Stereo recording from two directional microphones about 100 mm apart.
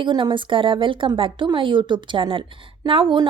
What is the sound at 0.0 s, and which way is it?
A woman's voice, 50° right (ahead or behind).